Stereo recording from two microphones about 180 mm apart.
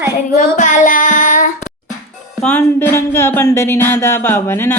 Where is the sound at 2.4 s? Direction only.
10° left (ahead or behind).